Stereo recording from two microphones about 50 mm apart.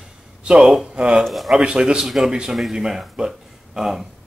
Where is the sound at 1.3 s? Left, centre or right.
Centre.